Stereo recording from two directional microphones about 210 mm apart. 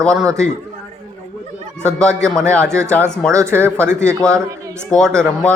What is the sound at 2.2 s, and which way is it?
Speech, 5° left (ahead or behind).